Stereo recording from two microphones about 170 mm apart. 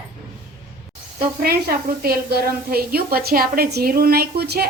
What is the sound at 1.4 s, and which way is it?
A woman's voice, 65° right (ahead or behind).